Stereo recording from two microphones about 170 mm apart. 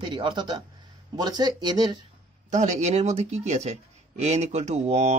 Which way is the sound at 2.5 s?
45° right (ahead or behind).